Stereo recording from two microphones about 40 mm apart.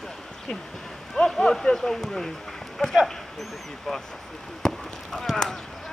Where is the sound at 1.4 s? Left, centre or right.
Centre.